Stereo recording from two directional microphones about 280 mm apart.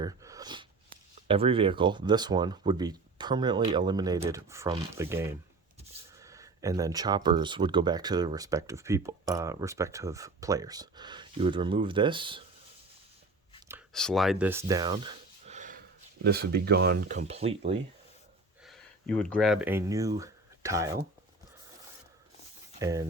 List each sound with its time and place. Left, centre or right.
0.0 s a sound: centre
1.3 s speech: centre
13.7 s speech: centre; by 17.7 s right
18.6 s speech: centre
22.8 s speech: centre